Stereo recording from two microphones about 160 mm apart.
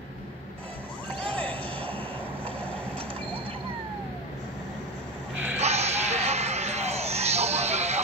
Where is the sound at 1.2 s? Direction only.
10° left (ahead or behind).